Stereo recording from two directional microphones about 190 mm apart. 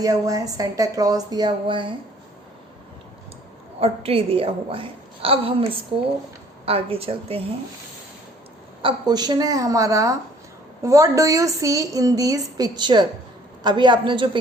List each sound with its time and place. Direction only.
0.0 s a woman's voice: 20° right (ahead or behind)
3.8 s a woman's voice: 30° right (ahead or behind)
6.7 s a woman's voice: 30° right (ahead or behind)
8.8 s a woman's voice: 25° right (ahead or behind)